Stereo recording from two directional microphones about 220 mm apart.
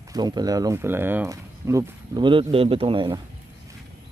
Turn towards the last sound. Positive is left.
turn(degrees=-20)  # may be behind; listen again after turning